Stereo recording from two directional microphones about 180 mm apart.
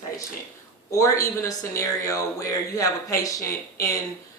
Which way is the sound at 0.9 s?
15° left (ahead or behind).